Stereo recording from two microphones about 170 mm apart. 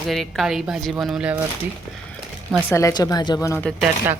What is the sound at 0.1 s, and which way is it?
Speech, centre (ahead or behind).